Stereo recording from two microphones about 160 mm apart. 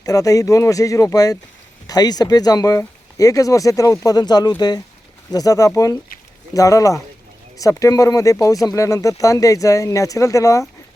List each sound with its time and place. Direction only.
0.0 s speech: 20° left (ahead or behind)